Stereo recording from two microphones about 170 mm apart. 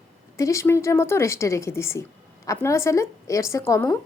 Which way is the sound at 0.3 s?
15° left (ahead or behind).